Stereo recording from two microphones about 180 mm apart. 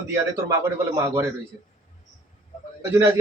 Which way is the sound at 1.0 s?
15° right (ahead or behind).